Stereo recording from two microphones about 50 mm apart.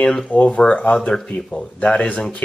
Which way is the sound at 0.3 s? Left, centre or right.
Left.